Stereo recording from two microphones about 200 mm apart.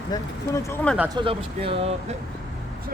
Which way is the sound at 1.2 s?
25° right (ahead or behind).